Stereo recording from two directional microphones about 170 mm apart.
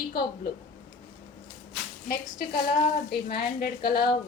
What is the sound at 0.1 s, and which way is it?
Speech, 65° left (ahead or behind).